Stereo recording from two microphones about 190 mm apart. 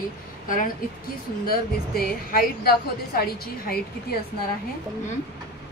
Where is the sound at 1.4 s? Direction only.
50° left (ahead or behind).